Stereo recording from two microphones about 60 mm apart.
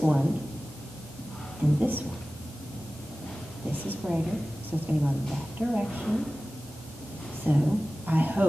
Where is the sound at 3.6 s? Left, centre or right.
Right.